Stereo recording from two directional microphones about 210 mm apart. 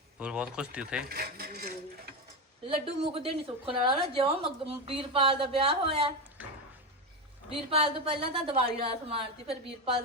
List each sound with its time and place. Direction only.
0.2 s speech: 5° right (ahead or behind)
1.0 s speech: 45° right (ahead or behind)
2.6 s a woman's voice: 30° right (ahead or behind)
7.5 s a woman's voice: 30° right (ahead or behind)